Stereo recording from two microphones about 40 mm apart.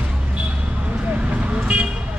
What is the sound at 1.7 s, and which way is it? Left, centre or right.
Vehicle, right.